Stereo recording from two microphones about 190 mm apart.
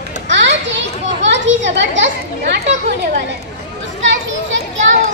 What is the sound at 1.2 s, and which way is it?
Speech, 75° right (ahead or behind).